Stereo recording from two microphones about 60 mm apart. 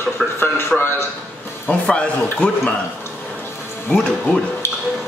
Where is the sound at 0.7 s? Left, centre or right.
Left.